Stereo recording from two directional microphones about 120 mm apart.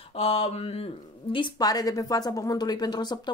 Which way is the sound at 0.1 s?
60° left (ahead or behind).